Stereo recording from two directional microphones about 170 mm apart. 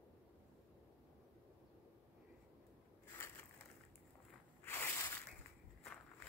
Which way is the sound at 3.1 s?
15° left (ahead or behind).